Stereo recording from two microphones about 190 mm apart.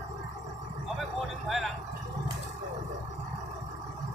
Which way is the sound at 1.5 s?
Centre (ahead or behind).